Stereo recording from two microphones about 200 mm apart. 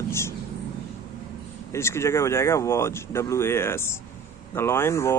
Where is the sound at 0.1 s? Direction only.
15° left (ahead or behind).